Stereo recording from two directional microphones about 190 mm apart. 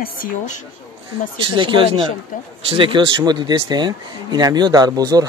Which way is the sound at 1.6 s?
25° right (ahead or behind).